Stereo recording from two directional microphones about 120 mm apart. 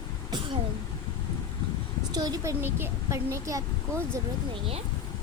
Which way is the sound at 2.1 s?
30° right (ahead or behind).